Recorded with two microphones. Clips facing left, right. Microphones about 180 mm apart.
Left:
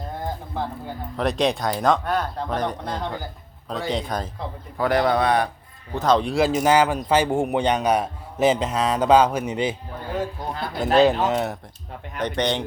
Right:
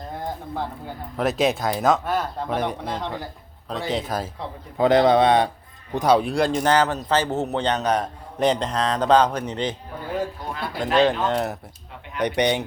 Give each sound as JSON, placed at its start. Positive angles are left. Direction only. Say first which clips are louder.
{"t": 0.1, "sound": "speech", "louder": "right 1 dB", "side_deg": 0}
{"t": 4.8, "sound": "a man's voice", "louder": "right 4 dB", "side_deg": -20}
{"t": 5.9, "sound": "speech", "louder": "right 1 dB", "side_deg": -10}
{"t": 6.3, "sound": "a man's voice", "louder": "left 1 dB", "side_deg": 5}
{"t": 10.9, "sound": "a man's voice", "louder": "left 2 dB", "side_deg": 10}
{"t": 12.2, "sound": "speech", "louder": "right 2 dB", "side_deg": -10}